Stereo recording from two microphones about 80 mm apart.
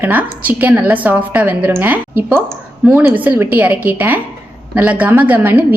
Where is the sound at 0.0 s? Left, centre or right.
Right.